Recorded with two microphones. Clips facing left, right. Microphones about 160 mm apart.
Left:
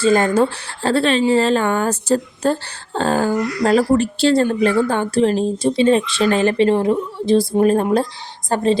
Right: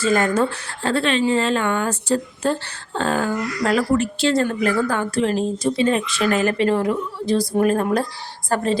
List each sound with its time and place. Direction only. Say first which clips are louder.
0.0 s a woman's voice: left 4 dB; 30° left (ahead or behind)